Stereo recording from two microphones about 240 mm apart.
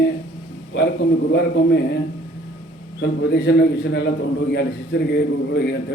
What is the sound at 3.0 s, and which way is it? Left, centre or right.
A man's voice, left.